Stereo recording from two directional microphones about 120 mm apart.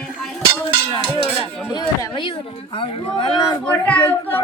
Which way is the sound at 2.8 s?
45° left (ahead or behind).